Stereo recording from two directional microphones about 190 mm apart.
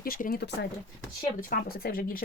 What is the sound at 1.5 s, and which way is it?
Speech, 50° left (ahead or behind).